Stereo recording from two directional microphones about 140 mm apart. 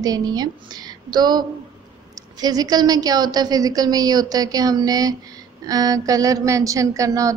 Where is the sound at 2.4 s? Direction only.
25° right (ahead or behind).